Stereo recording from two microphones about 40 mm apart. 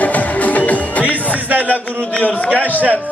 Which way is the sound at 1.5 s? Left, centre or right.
Right.